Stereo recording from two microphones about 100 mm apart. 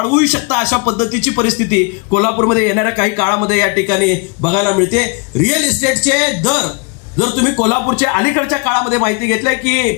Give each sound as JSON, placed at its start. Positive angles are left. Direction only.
{"t": 0.0, "sound": "speech", "side_deg": -20}
{"t": 2.0, "sound": "a man's voice", "side_deg": 5}